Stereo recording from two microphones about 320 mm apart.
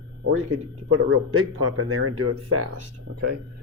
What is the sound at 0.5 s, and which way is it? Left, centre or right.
Speech, right.